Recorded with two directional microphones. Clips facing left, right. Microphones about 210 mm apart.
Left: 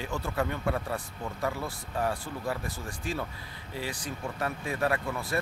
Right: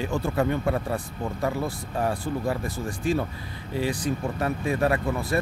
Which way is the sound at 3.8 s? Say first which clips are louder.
Right 10 dB; 20° right (ahead or behind).